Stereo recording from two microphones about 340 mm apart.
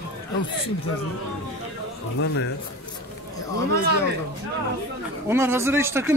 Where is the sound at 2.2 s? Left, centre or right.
Left.